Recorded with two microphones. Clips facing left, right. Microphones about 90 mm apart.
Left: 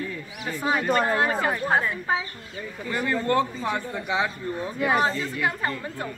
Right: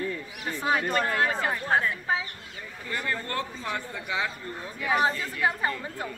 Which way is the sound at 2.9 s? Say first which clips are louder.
Left 7 dB; 20° left (ahead or behind).